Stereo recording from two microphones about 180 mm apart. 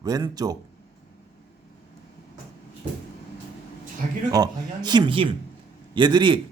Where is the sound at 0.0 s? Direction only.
20° right (ahead or behind).